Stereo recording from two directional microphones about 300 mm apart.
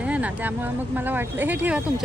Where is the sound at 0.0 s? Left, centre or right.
Centre.